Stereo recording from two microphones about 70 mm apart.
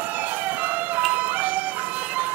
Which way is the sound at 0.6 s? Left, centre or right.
Right.